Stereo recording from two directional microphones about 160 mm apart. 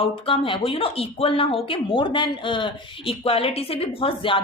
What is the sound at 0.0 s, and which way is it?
A woman's voice, 35° left (ahead or behind).